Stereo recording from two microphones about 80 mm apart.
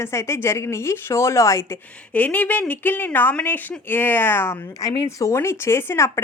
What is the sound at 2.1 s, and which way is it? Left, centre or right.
A woman's voice, centre.